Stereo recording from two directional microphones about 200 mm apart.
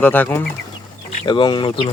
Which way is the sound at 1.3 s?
20° left (ahead or behind).